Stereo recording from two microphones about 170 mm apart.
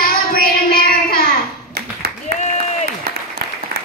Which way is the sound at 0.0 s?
60° left (ahead or behind).